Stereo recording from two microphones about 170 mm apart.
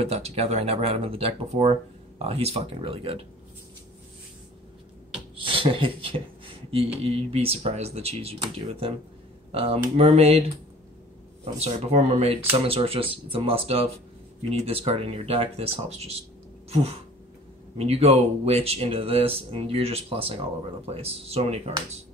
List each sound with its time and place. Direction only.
0.0 s speech: 40° right (ahead or behind)
5.3 s speech: 30° right (ahead or behind)
11.5 s speech: 40° right (ahead or behind)